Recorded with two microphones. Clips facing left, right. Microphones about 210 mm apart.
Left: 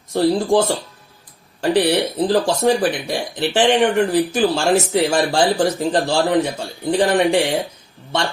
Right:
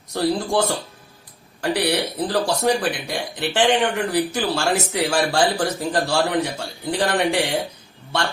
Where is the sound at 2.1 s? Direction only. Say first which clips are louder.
Left 5 dB; 20° left (ahead or behind).